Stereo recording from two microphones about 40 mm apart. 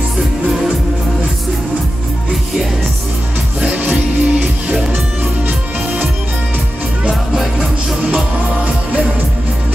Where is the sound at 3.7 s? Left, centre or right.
Right.